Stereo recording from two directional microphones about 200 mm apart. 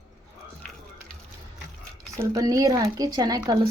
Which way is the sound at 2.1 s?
15° right (ahead or behind).